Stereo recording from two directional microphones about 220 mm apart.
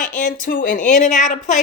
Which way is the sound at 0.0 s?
35° left (ahead or behind).